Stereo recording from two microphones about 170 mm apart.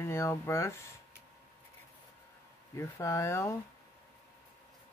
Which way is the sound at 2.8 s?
15° left (ahead or behind).